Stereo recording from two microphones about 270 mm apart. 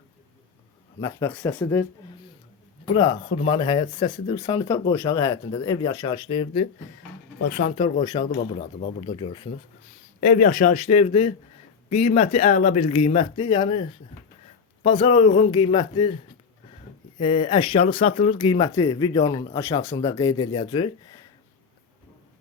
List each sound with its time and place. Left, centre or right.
1.0 s speech: centre
2.9 s speech: centre
7.4 s speech: left
7.8 s speech: centre
10.2 s speech: left
14.8 s speech: centre
17.2 s speech: centre